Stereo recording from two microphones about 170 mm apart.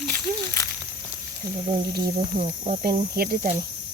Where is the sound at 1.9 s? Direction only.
60° right (ahead or behind).